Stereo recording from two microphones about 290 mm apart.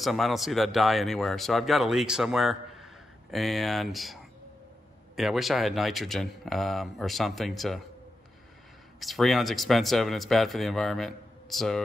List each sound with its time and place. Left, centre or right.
0.0 s speech: centre
9.0 s speech: centre